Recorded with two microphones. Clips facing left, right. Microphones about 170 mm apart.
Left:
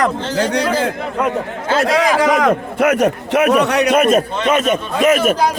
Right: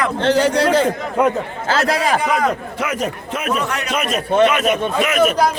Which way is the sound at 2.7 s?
60° left (ahead or behind).